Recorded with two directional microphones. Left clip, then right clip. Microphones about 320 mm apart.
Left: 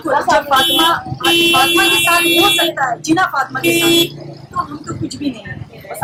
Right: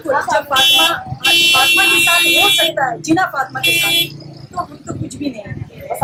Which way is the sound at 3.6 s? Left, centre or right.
Left.